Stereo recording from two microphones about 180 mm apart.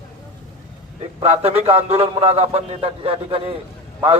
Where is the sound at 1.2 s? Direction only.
35° right (ahead or behind).